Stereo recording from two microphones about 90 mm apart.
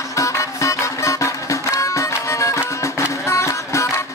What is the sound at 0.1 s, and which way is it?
Music, 35° left (ahead or behind).